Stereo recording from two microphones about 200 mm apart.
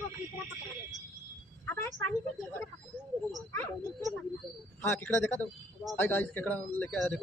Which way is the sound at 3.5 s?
10° left (ahead or behind).